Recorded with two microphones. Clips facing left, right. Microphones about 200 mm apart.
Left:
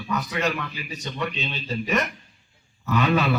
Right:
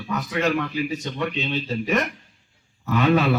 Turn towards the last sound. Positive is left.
turn(degrees=-50)  # may be behind; listen again after turning